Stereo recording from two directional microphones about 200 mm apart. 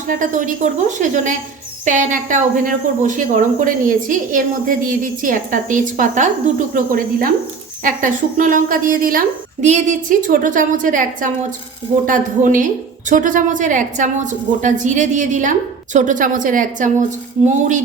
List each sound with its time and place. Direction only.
0.1 s speech: 40° right (ahead or behind)